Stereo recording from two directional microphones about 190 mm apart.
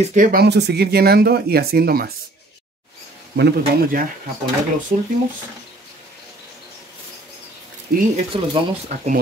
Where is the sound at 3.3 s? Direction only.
55° right (ahead or behind).